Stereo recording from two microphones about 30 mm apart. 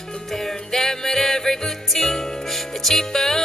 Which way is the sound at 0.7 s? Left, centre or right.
Centre.